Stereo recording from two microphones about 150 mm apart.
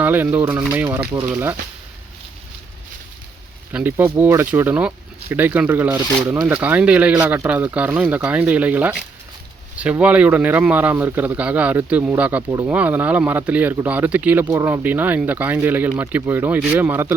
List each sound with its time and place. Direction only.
0.0 s speech: 10° right (ahead or behind)
3.7 s speech: 10° right (ahead or behind)
7.2 s a man's voice: 20° right (ahead or behind)